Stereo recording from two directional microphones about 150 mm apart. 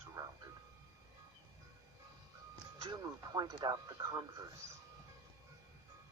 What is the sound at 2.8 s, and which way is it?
Speech, 25° right (ahead or behind).